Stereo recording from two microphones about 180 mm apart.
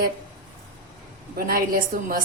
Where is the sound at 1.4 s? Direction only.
55° right (ahead or behind).